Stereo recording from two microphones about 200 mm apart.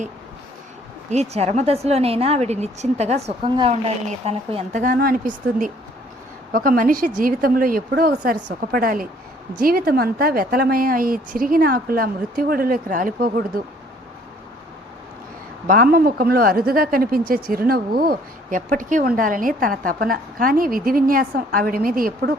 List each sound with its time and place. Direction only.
1.1 s a woman's voice: 30° right (ahead or behind)
15.6 s speech: 45° right (ahead or behind)